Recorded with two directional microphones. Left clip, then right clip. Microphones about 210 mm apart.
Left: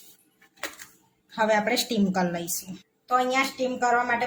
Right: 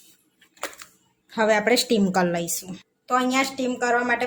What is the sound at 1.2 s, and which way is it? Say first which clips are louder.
A woman's voice: right 3 dB; 25° right (ahead or behind).